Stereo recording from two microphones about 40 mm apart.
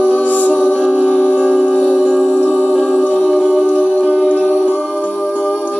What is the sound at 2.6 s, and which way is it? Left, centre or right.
Music, centre.